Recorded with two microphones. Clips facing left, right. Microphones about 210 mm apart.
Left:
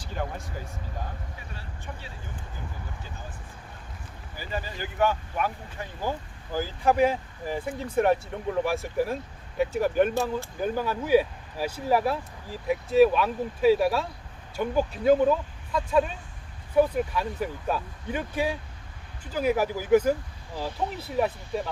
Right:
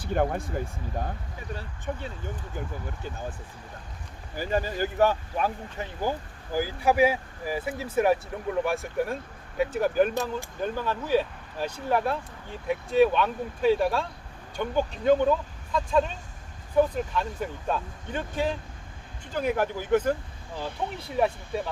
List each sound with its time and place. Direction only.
0.0 s speech: 55° right (ahead or behind)
1.9 s speech: 45° right (ahead or behind)
4.4 s speech: 45° right (ahead or behind)
5.8 s speech: 10° right (ahead or behind)